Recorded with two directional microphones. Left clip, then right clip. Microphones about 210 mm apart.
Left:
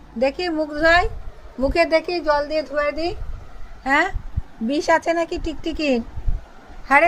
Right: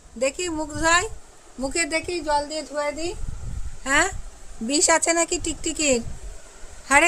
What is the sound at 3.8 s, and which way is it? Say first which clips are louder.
A woman's voice: left 2 dB; 15° right (ahead or behind).